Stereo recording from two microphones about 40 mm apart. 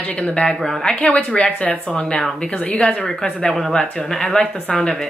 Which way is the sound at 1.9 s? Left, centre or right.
Left.